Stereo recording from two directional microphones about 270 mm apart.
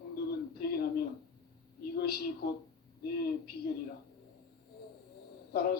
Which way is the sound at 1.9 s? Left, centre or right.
Left.